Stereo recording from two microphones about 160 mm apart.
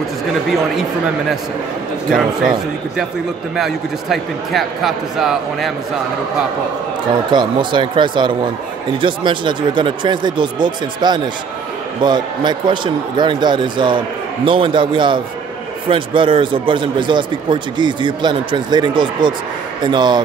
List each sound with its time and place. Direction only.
0.7 s a man's voice: centre (ahead or behind)
3.5 s a man's voice: centre (ahead or behind)
7.2 s a man's voice: 30° right (ahead or behind)